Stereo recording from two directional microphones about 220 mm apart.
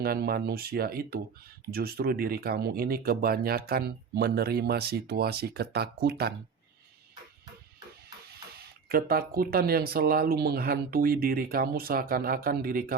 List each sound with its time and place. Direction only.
0.0 s speech: 45° right (ahead or behind)
8.9 s speech: 45° right (ahead or behind)